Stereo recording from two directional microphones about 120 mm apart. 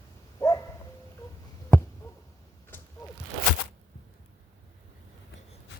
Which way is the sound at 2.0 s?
25° left (ahead or behind).